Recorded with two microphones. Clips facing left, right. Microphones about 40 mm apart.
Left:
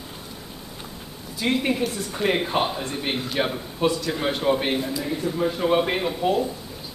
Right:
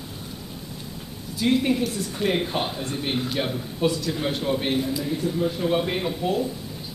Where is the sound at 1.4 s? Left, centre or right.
Centre.